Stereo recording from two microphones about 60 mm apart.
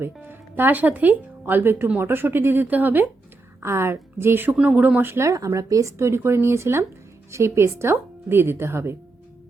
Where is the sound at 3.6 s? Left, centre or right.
Right.